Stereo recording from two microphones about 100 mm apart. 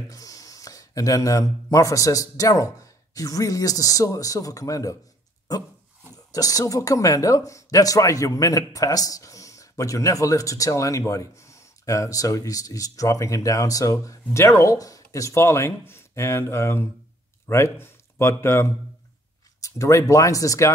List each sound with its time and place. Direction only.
0.1 s speech: 35° left (ahead or behind)
6.1 s speech: 35° left (ahead or behind)